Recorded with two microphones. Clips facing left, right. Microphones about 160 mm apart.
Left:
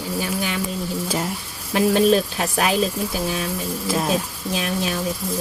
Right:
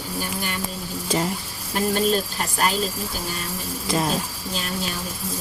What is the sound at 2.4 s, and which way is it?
Speech, 70° left (ahead or behind).